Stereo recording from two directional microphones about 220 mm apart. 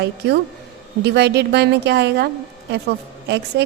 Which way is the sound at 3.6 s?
45° right (ahead or behind).